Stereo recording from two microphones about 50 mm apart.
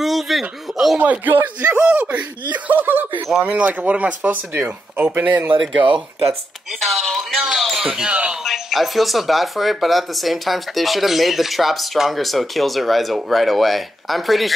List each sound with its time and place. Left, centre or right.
0.0 s speech: centre
0.9 s speech: right
3.4 s speech: right
6.8 s speech: centre
8.1 s speech: right
8.5 s speech: centre